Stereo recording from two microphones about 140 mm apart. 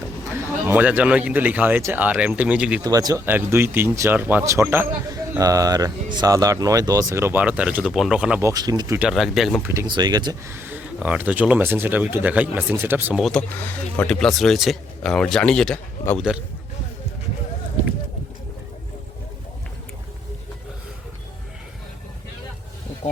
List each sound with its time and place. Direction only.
0.3 s speech: 10° right (ahead or behind)
2.8 s speech: 25° right (ahead or behind)
3.2 s speech: 15° right (ahead or behind)
8.4 s speech: 25° right (ahead or behind)
9.0 s speech: 5° right (ahead or behind)
9.8 s speech: 30° right (ahead or behind)
10.4 s speech: 15° right (ahead or behind)
13.1 s speech: centre (ahead or behind)
13.5 s speech: 10° left (ahead or behind)